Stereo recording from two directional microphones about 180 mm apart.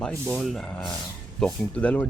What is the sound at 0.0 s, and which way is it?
Speech, 5° left (ahead or behind).